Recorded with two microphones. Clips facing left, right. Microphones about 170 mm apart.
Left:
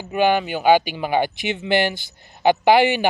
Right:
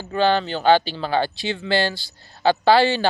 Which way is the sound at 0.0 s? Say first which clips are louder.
Left 1 dB; 15° left (ahead or behind).